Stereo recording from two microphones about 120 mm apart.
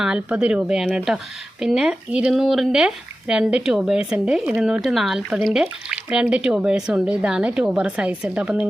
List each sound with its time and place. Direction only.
0.0 s speech: 5° right (ahead or behind)